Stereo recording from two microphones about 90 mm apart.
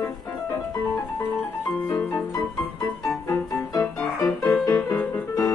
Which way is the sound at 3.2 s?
40° left (ahead or behind).